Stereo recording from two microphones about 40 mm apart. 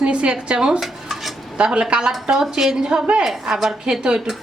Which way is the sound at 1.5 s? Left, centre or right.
Right.